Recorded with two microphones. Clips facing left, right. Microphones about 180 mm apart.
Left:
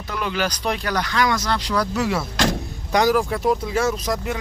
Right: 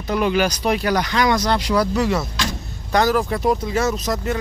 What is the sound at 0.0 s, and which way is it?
Speech, 20° right (ahead or behind).